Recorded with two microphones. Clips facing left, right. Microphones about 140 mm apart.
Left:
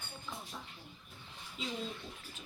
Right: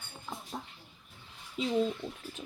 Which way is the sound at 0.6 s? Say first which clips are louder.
Right 6 dB; 50° right (ahead or behind).